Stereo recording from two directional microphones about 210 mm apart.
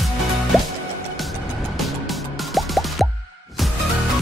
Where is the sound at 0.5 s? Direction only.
Centre (ahead or behind).